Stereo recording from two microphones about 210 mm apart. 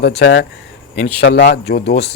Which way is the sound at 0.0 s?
55° left (ahead or behind).